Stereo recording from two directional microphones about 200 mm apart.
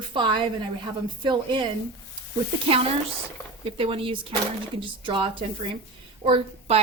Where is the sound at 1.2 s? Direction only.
25° right (ahead or behind).